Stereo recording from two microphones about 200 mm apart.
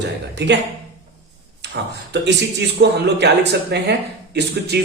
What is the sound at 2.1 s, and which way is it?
Speech, 60° right (ahead or behind).